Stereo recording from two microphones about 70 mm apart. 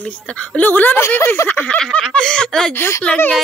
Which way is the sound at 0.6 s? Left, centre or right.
Left.